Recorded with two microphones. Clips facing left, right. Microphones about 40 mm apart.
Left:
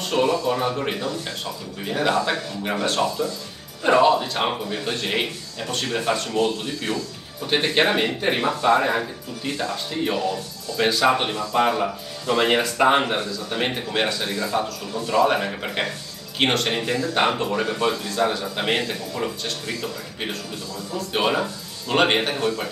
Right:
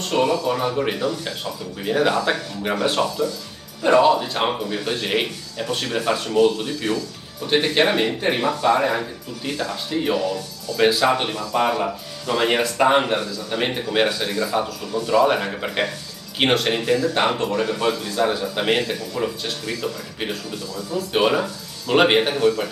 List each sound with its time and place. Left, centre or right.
0.1 s speech: centre
3.8 s speech: centre